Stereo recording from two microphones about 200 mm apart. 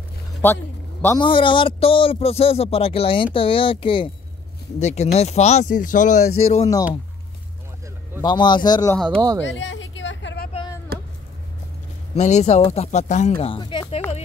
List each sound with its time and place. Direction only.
1.0 s speech: 20° left (ahead or behind)
8.2 s speech: 20° left (ahead or behind)
8.9 s speech: 5° left (ahead or behind)
9.4 s a sound: 70° left (ahead or behind)
12.2 s speech: 35° left (ahead or behind)